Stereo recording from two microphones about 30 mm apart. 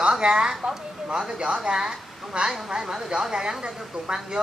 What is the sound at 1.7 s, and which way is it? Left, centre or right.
Speech, right.